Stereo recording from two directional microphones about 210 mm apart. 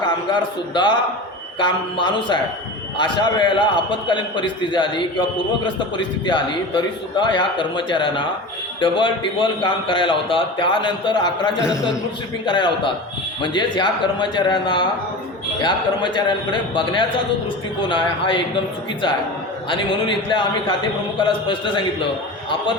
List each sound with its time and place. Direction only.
0.7 s a man's voice: 20° left (ahead or behind)
6.2 s a man's voice: 20° left (ahead or behind)
11.6 s a man's voice: 5° right (ahead or behind)
12.5 s a man's voice: 20° left (ahead or behind)
19.7 s a man's voice: 25° left (ahead or behind)